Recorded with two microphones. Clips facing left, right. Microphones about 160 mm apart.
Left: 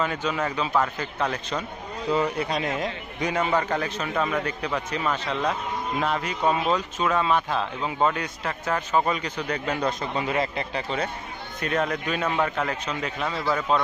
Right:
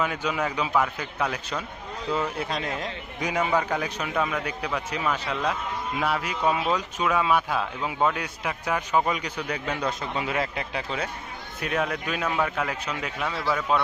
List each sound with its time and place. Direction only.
0.0 s a man's voice: 10° right (ahead or behind)
3.2 s a man's voice: 10° right (ahead or behind)
4.1 s speech: centre (ahead or behind)
4.9 s a man's voice: 10° right (ahead or behind)